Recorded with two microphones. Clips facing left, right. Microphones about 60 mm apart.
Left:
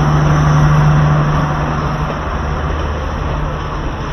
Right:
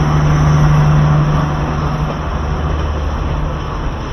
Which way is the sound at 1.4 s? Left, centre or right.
Left.